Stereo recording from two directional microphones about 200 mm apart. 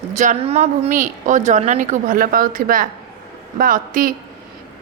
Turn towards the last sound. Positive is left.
turn(degrees=-45)  # may be behind; listen again after turning